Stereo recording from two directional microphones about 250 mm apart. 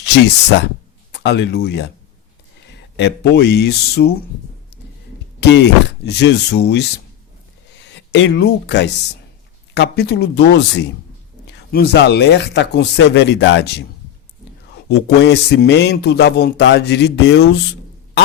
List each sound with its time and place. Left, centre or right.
0.0 s speech: left
3.0 s speech: left
5.4 s a man's voice: left
14.8 s a man's voice: left